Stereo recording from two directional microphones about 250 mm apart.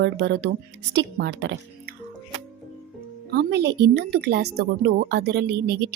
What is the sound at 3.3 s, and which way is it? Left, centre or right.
A woman's voice, right.